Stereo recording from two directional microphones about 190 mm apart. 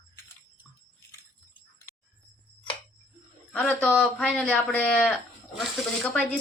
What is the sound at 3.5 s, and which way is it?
Speech, 10° left (ahead or behind).